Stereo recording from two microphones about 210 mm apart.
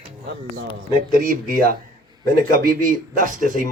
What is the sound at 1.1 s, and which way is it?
Speech, 40° right (ahead or behind).